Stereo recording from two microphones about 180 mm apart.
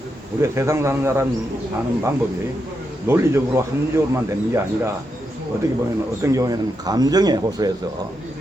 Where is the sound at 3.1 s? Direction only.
15° right (ahead or behind).